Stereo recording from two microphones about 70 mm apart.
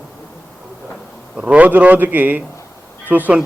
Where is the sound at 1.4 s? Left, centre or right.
Centre.